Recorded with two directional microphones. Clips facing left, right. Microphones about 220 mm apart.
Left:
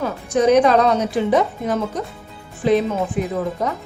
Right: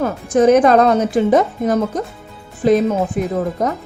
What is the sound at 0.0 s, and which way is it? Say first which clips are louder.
Speech: right 4 dB; 50° right (ahead or behind).